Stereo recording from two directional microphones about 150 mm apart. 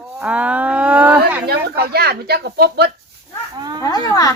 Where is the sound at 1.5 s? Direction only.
90° right.